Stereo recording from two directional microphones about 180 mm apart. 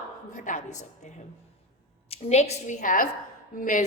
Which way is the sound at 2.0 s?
35° left (ahead or behind).